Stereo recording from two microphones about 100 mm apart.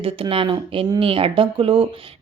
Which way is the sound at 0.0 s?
60° right (ahead or behind).